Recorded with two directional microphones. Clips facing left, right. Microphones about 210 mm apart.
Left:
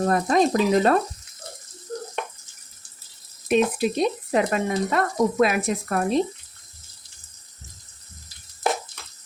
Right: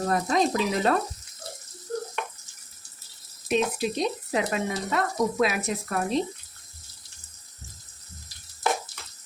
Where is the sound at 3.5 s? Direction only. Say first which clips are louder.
Left 5 dB; 55° left (ahead or behind).